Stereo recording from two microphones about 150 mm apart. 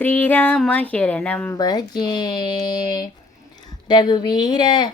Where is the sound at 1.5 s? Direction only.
25° left (ahead or behind).